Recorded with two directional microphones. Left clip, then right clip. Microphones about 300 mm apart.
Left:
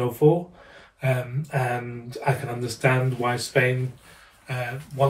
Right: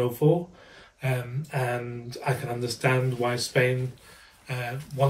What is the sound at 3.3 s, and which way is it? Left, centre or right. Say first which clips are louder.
Speech: left 2 dB; centre.